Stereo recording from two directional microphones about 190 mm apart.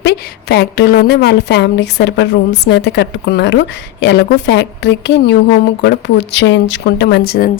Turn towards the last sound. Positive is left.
turn(degrees=55)  # may be behind; listen again after turning